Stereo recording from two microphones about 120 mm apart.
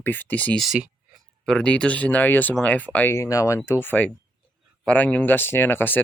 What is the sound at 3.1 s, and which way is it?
Speech, 25° left (ahead or behind).